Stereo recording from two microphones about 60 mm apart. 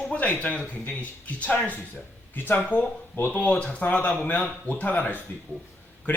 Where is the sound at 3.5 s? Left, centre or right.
Centre.